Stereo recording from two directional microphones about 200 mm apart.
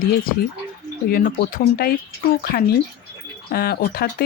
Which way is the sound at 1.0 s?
50° left (ahead or behind).